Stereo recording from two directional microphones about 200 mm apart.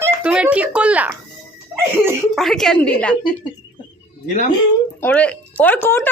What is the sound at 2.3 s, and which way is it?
Speech, centre (ahead or behind).